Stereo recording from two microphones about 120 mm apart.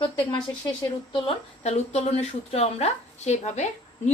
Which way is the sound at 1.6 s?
65° left (ahead or behind).